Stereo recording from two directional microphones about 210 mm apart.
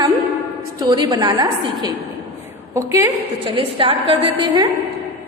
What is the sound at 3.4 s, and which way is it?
A woman's voice, 25° right (ahead or behind).